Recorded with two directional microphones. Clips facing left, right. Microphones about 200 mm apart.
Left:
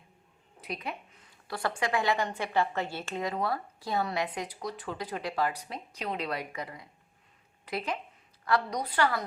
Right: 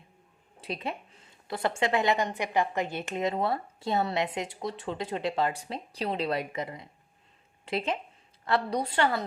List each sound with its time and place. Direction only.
0.6 s a woman's voice: 25° right (ahead or behind)